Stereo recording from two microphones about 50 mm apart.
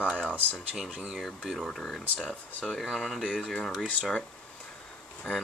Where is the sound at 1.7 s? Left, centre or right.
Centre.